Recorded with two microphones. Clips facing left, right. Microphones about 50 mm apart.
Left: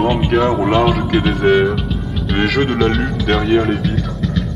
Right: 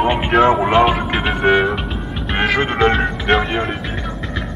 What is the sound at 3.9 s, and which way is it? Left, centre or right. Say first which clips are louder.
Music: left 4 dB; right.